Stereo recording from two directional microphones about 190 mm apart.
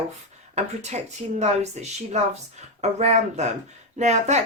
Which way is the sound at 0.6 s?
35° right (ahead or behind).